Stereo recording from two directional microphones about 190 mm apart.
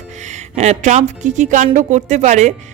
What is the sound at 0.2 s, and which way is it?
Speech, 40° right (ahead or behind).